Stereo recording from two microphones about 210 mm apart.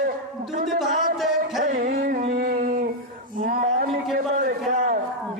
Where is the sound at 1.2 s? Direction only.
Centre (ahead or behind).